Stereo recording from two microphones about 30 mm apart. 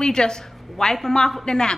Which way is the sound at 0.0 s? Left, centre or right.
Left.